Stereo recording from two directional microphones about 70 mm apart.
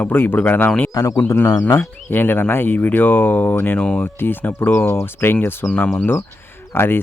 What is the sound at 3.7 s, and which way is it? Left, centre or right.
Speech, centre.